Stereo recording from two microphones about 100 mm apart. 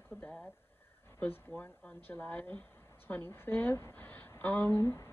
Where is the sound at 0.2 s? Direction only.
15° left (ahead or behind).